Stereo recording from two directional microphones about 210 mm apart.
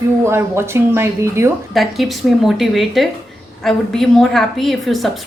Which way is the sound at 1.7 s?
Centre (ahead or behind).